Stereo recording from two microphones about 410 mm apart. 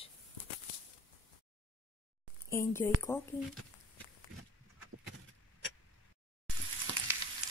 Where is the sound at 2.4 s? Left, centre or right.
Centre.